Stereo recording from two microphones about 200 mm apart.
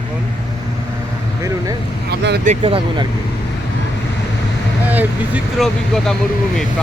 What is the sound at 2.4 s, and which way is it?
Speech, 30° right (ahead or behind).